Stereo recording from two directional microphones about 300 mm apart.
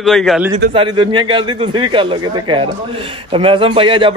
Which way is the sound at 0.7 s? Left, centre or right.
Centre.